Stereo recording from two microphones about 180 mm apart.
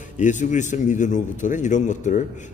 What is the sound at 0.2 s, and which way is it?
A man's voice, 45° left (ahead or behind).